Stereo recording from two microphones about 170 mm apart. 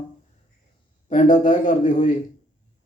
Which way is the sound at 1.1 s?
45° left (ahead or behind).